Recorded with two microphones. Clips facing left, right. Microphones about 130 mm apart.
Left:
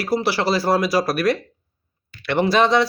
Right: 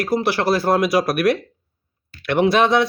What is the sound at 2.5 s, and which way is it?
Speech, 55° right (ahead or behind).